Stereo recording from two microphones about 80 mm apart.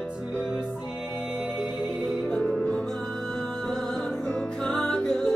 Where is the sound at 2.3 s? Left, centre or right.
Centre.